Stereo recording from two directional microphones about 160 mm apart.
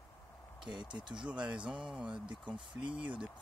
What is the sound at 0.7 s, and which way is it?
Speech, 30° right (ahead or behind).